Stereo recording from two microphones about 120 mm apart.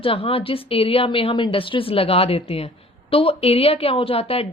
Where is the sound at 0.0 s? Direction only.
50° left (ahead or behind).